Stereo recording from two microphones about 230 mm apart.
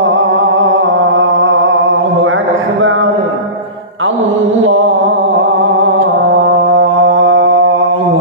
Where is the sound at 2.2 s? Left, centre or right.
Right.